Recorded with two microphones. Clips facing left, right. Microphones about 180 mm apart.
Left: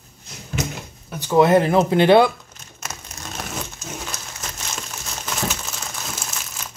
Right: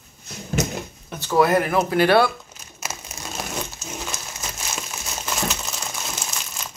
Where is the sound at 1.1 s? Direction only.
15° left (ahead or behind).